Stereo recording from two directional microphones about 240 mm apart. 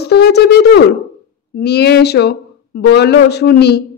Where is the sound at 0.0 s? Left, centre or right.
Left.